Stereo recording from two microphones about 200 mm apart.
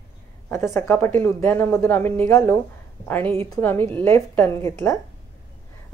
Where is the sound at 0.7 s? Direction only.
10° left (ahead or behind).